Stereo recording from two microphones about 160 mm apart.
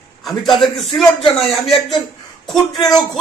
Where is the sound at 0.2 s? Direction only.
Centre (ahead or behind).